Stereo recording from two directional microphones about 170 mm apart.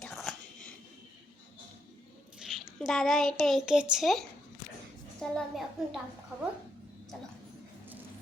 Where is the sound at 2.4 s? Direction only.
Centre (ahead or behind).